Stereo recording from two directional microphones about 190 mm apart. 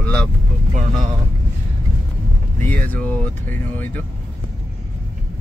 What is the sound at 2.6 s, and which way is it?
Speech, 10° left (ahead or behind).